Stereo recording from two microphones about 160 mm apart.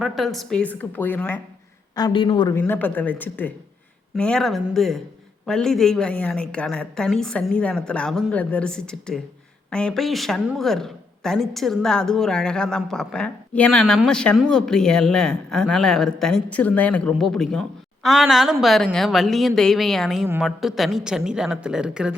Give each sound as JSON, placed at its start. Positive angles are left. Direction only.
{"t": 0.0, "sound": "a woman's voice", "side_deg": 0}
{"t": 2.0, "sound": "a woman's voice", "side_deg": 25}
{"t": 2.6, "sound": "a woman's voice", "side_deg": 10}